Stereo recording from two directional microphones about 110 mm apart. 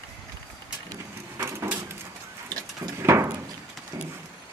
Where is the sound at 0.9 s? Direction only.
25° right (ahead or behind).